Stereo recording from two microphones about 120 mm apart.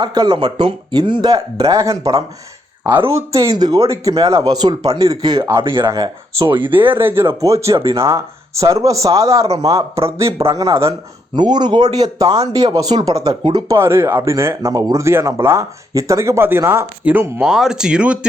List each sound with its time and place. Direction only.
0.0 s speech: 35° right (ahead or behind)
5.4 s speech: 20° right (ahead or behind)
6.5 s speech: 45° right (ahead or behind)
6.7 s speech: 20° right (ahead or behind)
11.3 s speech: 35° right (ahead or behind)
13.7 s speech: 20° right (ahead or behind)
17.4 s speech: 5° right (ahead or behind)